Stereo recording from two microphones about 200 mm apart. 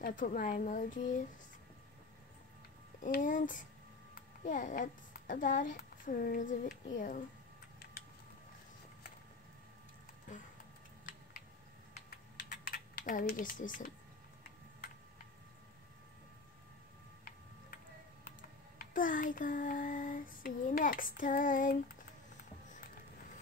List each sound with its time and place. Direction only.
0.0 s speech: 40° left (ahead or behind)
3.0 s a child's voice: 40° left (ahead or behind)
12.1 s typing: 45° left (ahead or behind)
18.8 s child singing: 40° left (ahead or behind)